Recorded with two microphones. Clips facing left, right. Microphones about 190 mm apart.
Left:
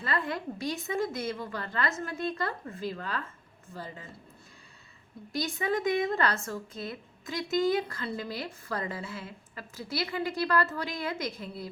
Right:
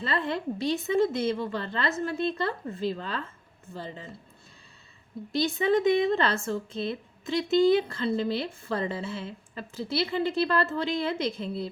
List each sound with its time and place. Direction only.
0.0 s a woman's voice: 25° right (ahead or behind)
5.3 s a woman's voice: 25° right (ahead or behind)